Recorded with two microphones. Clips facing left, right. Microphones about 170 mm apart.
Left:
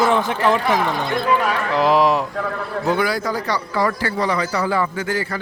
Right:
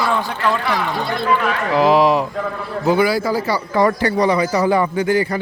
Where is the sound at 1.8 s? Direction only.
Centre (ahead or behind).